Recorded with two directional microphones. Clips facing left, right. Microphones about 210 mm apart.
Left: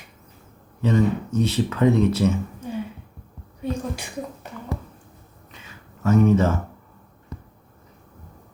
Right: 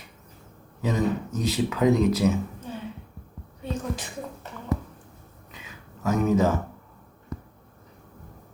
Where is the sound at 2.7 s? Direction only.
10° left (ahead or behind).